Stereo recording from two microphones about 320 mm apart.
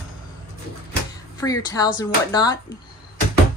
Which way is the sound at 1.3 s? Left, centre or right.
Centre.